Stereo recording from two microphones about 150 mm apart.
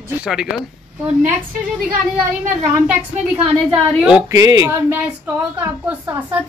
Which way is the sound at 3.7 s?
5° right (ahead or behind).